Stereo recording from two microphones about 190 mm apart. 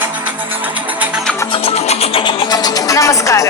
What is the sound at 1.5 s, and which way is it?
Speech, 30° left (ahead or behind).